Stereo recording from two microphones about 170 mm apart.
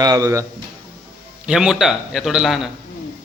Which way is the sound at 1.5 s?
5° right (ahead or behind).